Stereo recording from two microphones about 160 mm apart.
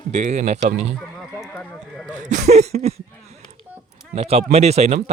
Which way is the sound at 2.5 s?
45° right (ahead or behind).